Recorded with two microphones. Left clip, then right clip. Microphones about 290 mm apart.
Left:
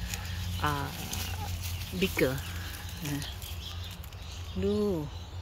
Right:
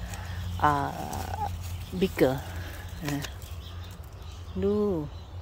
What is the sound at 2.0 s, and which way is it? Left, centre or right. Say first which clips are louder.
Speech: right 4 dB; centre.